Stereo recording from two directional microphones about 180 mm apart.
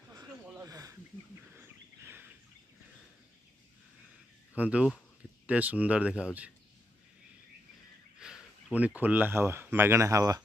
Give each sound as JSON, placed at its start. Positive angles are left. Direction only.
{"t": 0.1, "sound": "a sound", "side_deg": -20}
{"t": 4.6, "sound": "speech", "side_deg": -5}
{"t": 8.2, "sound": "speech", "side_deg": -5}